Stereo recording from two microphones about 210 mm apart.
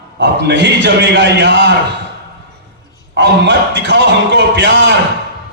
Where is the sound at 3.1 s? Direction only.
55° right (ahead or behind).